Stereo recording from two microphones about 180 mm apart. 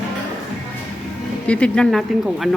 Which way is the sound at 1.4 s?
5° left (ahead or behind).